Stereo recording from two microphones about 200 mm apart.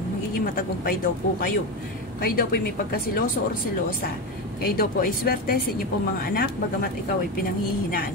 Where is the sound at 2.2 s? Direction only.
50° left (ahead or behind).